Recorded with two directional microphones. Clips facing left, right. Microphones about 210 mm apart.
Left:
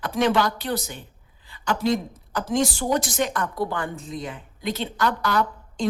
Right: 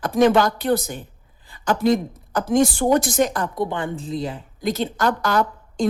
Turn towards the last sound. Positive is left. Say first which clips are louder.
# right 3 dB
turn(degrees=-45)  # may be behind; listen again after turning